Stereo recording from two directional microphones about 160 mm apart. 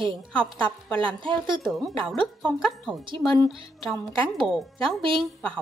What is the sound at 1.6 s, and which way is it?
Speech, centre (ahead or behind).